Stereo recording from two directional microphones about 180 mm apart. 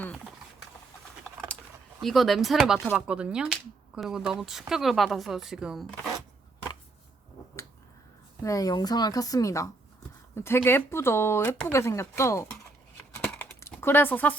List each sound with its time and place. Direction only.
2.0 s speech: centre (ahead or behind)
8.4 s speech: 20° left (ahead or behind)
13.1 s typing: 10° left (ahead or behind)